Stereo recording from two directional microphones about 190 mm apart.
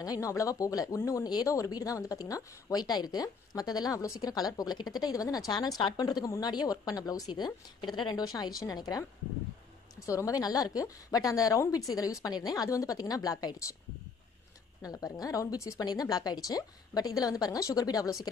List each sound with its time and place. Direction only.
0.0 s a woman's voice: 15° left (ahead or behind)
14.8 s a woman's voice: 20° left (ahead or behind)